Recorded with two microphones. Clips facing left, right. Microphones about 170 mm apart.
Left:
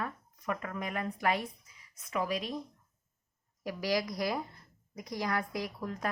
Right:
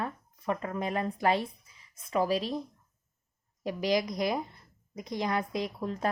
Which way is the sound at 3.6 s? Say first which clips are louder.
Right 4 dB; 20° right (ahead or behind).